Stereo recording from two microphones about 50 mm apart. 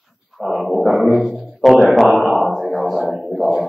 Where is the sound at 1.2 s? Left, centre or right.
Centre.